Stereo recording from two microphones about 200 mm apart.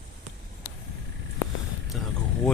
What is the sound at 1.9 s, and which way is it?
Vehicle, centre (ahead or behind).